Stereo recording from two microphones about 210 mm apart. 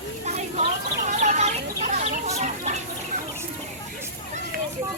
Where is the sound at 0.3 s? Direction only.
30° right (ahead or behind).